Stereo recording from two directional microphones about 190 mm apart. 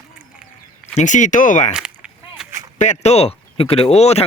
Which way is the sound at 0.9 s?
40° left (ahead or behind).